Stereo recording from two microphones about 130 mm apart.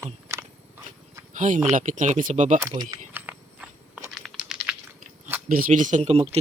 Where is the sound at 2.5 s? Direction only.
30° right (ahead or behind).